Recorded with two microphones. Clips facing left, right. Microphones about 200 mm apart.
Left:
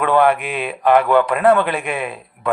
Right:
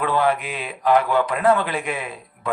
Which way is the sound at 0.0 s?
60° left (ahead or behind).